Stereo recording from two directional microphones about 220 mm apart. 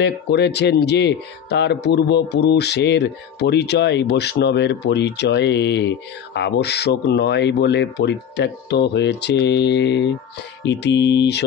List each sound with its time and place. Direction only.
0.0 s speech: 50° left (ahead or behind)